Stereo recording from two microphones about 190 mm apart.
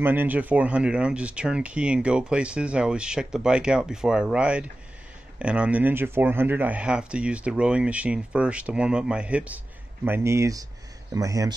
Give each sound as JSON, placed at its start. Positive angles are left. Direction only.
{"t": 0.0, "sound": "speech", "side_deg": -10}